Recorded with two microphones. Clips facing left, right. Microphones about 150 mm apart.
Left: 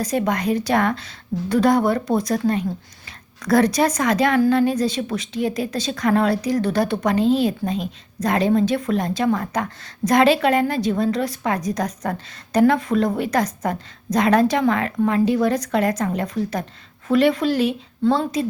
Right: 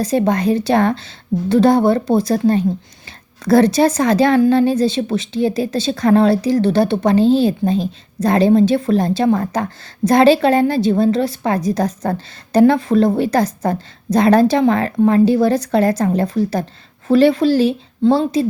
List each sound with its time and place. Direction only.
0.0 s a woman's voice: 30° right (ahead or behind)